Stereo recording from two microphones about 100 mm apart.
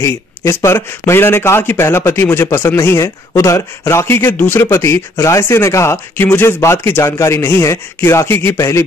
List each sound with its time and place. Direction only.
0.0 s a man's voice: 25° left (ahead or behind)